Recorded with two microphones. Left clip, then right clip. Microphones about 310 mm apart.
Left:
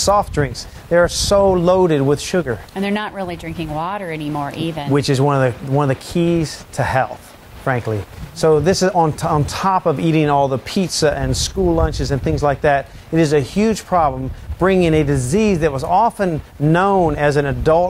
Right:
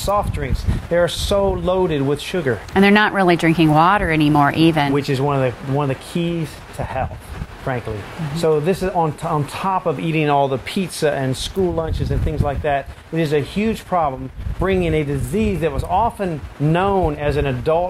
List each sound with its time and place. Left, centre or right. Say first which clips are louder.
0.0 s speech: left 5 dB; left
2.7 s speech: right 8 dB; right
4.9 s speech: left 3 dB; left